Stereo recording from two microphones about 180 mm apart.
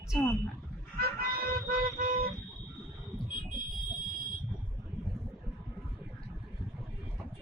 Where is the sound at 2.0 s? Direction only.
50° right (ahead or behind).